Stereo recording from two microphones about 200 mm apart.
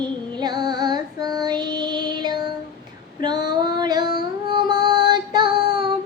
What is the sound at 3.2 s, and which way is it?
Child singing, 20° right (ahead or behind).